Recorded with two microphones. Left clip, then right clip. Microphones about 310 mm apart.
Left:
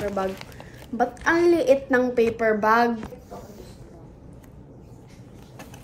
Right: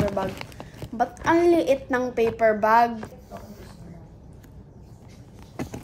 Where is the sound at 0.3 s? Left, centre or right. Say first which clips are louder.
Even; right.